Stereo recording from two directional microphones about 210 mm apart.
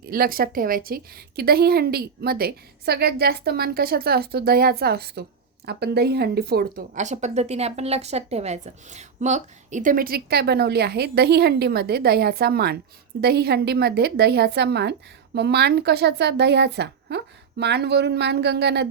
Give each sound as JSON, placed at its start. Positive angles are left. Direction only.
{"t": 0.0, "sound": "speech", "side_deg": -45}